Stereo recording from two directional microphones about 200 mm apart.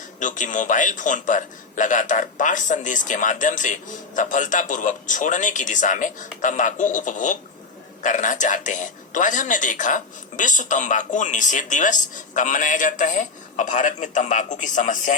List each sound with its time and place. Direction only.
0.2 s a man's voice: 40° left (ahead or behind)